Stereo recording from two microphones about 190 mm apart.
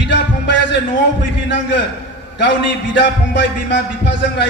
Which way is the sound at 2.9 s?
70° left (ahead or behind).